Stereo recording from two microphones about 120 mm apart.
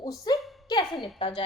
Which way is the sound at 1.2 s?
55° left (ahead or behind).